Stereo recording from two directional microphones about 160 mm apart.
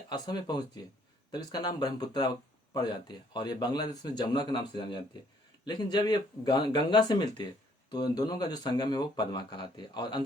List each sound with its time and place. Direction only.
0.1 s speech: 25° left (ahead or behind)